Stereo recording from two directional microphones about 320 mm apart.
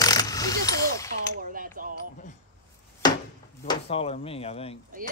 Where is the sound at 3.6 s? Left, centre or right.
Centre.